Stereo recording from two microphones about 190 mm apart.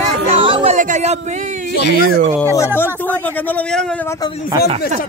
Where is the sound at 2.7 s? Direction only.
10° left (ahead or behind).